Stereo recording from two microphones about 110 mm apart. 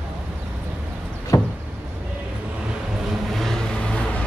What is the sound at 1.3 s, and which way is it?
Knock, 35° left (ahead or behind).